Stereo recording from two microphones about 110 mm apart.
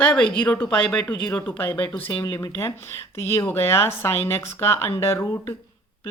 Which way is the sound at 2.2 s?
30° left (ahead or behind).